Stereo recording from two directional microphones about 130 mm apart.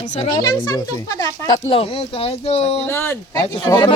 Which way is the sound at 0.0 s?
60° left (ahead or behind).